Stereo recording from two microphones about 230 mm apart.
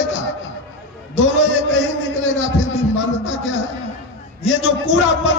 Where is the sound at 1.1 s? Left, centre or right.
Left.